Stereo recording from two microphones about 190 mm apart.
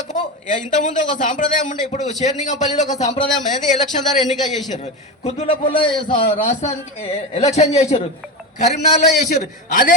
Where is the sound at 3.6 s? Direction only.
40° left (ahead or behind).